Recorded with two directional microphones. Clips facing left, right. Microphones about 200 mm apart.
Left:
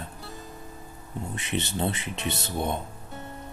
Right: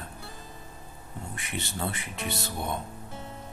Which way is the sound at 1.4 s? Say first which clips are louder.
Left 5 dB; 25° left (ahead or behind).